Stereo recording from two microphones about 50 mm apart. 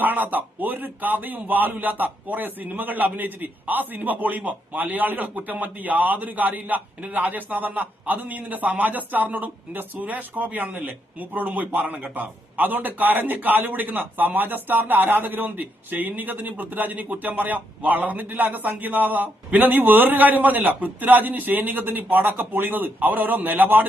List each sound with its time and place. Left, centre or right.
0.0 s a man's voice: right